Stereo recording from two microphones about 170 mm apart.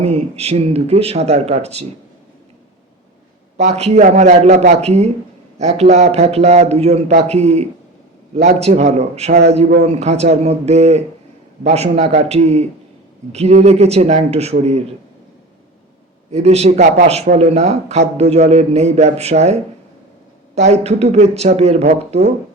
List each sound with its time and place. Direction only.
0.0 s a man's voice: 35° right (ahead or behind)
3.6 s a man's voice: 40° right (ahead or behind)
16.3 s a man's voice: 40° right (ahead or behind)